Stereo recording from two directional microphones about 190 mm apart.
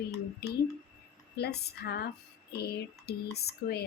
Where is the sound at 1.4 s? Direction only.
60° left (ahead or behind).